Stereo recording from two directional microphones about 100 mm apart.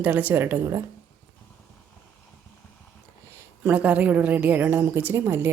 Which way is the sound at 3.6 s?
15° right (ahead or behind).